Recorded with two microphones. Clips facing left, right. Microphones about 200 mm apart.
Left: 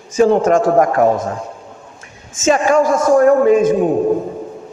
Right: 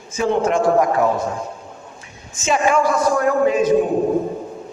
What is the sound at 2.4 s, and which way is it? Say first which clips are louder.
A man's voice: left 5 dB; 45° left (ahead or behind).